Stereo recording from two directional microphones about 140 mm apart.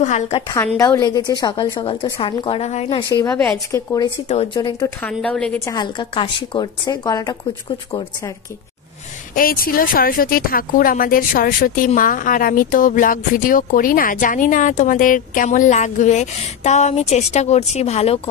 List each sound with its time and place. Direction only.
0.0 s a woman's voice: 55° left (ahead or behind)
0.7 s a woman's voice: 20° left (ahead or behind); by 3.0 s 50° left (ahead or behind)
3.0 s a woman's voice: 30° left (ahead or behind)
3.3 s a woman's voice: 5° left (ahead or behind)
3.7 s a woman's voice: 25° left (ahead or behind)
5.0 s a woman's voice: 10° left (ahead or behind)
5.7 s a woman's voice: 35° left (ahead or behind)
9.3 s speech: 90° left; by 18.3 s 45° left (ahead or behind)